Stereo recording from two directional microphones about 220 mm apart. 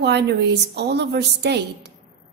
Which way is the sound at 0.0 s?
50° right (ahead or behind).